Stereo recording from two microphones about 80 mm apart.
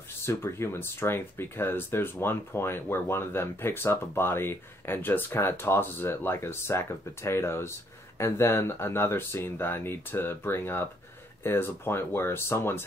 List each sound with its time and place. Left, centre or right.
0.2 s speech: left